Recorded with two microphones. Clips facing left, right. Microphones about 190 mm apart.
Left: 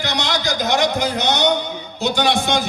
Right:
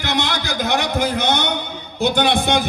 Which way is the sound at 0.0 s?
55° right (ahead or behind).